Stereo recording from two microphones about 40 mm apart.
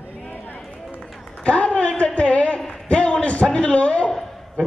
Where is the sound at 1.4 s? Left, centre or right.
Left.